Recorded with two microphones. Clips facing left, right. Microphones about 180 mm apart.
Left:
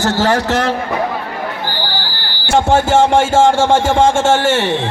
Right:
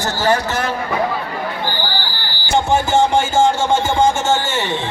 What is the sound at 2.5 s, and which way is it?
A man's voice, 90° left.